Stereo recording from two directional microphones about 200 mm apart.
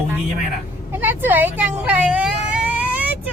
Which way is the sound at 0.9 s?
10° right (ahead or behind).